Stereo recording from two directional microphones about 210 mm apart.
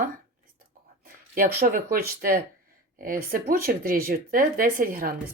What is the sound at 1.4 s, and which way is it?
Speech, 45° right (ahead or behind).